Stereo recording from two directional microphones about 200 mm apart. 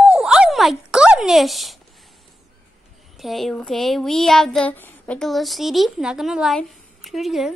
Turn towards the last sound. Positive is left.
turn(degrees=0)  # may be behind; listen again after turning